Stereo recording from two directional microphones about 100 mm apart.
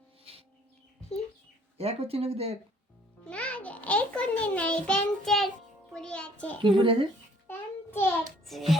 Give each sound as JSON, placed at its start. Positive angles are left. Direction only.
{"t": 0.3, "sound": "music", "side_deg": -75}
{"t": 1.8, "sound": "speech", "side_deg": -90}
{"t": 3.2, "sound": "a child's voice", "side_deg": 10}
{"t": 6.6, "sound": "speech", "side_deg": -55}
{"t": 7.4, "sound": "music", "side_deg": 20}
{"t": 8.4, "sound": "music", "side_deg": 0}